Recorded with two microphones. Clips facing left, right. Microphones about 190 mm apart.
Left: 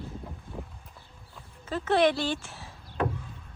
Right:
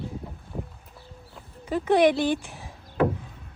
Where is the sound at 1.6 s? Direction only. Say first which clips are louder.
Right 4 dB; 15° right (ahead or behind).